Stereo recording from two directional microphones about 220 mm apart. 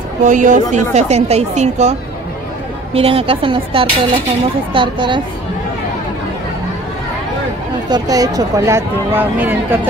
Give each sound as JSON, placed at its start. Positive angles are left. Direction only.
{"t": 0.2, "sound": "a woman's voice", "side_deg": -35}
{"t": 7.9, "sound": "speech", "side_deg": -15}